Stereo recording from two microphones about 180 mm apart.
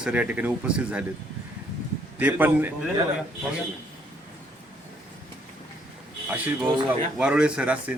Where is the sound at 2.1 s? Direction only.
10° right (ahead or behind).